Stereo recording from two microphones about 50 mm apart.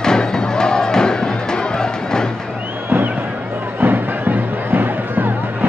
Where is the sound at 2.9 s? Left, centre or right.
Right.